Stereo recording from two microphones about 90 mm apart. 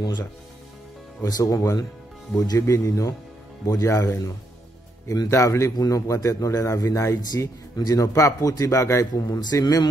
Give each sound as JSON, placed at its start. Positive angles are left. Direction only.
{"t": 1.2, "sound": "a man's voice", "side_deg": 40}
{"t": 5.3, "sound": "a man's voice", "side_deg": 35}